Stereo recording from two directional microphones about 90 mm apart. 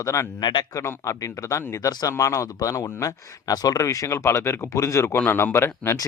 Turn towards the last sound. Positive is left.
turn(degrees=25)  # may be behind; listen again after turning